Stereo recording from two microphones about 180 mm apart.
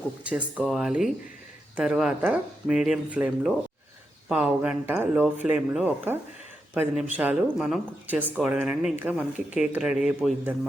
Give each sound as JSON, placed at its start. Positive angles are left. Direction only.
{"t": 0.3, "sound": "speech", "side_deg": -5}